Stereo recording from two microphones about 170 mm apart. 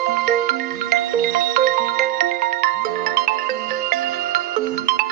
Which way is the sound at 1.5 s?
60° right (ahead or behind).